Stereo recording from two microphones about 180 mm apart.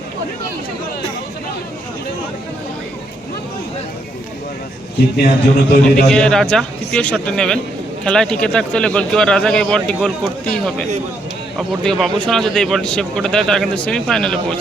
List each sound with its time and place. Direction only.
5.1 s a man's voice: 60° left (ahead or behind)
6.1 s speech: 5° left (ahead or behind)
11.5 s speech: centre (ahead or behind)